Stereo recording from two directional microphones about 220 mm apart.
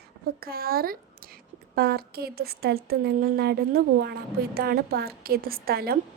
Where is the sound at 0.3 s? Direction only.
45° right (ahead or behind).